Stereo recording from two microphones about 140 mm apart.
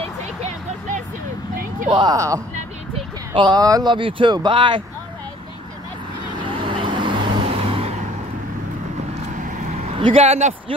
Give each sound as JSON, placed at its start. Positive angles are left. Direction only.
{"t": 0.4, "sound": "vehicle", "side_deg": -55}
{"t": 1.9, "sound": "a woman's voice", "side_deg": -30}
{"t": 2.9, "sound": "speech", "side_deg": -35}
{"t": 6.3, "sound": "vehicle", "side_deg": -35}
{"t": 9.9, "sound": "speech", "side_deg": -40}